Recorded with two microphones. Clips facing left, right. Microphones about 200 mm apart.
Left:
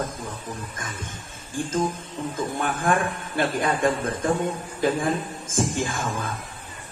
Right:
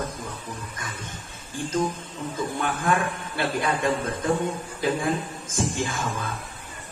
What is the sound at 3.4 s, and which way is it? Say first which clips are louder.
Speech: left 3 dB; 50° left (ahead or behind).